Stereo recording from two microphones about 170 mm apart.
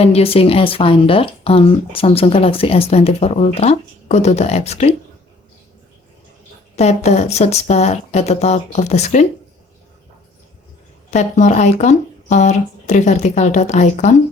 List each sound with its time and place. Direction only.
0.0 s speech: 35° left (ahead or behind)
6.7 s speech: 40° left (ahead or behind)
11.1 s speech: 45° left (ahead or behind)